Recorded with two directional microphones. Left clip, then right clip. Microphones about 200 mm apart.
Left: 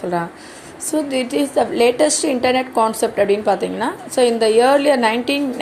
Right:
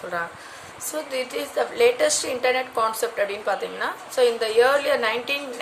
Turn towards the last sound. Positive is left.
turn(degrees=25)  # may be behind; listen again after turning